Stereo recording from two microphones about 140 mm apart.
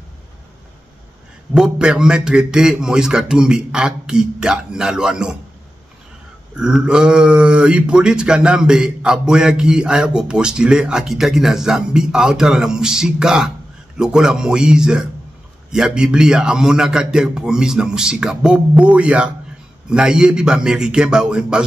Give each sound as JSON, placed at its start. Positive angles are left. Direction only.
{"t": 1.5, "sound": "speech", "side_deg": -5}
{"t": 6.5, "sound": "speech", "side_deg": -5}